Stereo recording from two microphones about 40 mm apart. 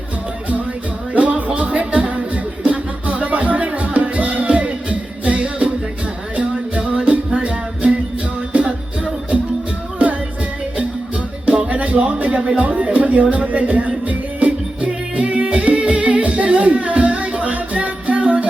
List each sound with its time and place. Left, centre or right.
1.1 s music: right
11.7 s a sound: right
13.3 s music: right